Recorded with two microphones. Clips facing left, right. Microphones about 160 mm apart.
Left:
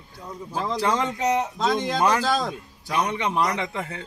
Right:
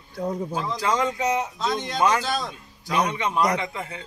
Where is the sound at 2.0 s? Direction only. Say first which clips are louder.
Right 2 dB; 40° left (ahead or behind).